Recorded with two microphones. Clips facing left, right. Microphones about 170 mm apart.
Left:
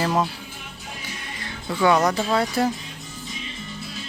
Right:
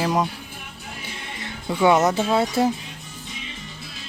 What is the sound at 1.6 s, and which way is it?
Speech, 20° right (ahead or behind).